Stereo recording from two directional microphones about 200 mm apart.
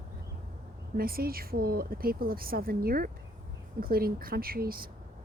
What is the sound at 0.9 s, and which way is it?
Speech, 45° right (ahead or behind).